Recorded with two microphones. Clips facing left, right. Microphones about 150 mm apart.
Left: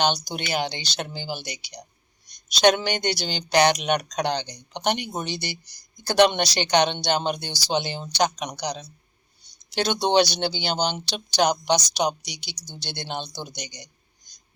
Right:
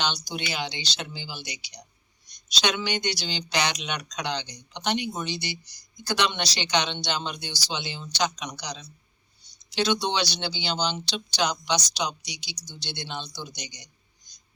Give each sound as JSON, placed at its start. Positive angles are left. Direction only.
{"t": 0.0, "sound": "speech", "side_deg": 50}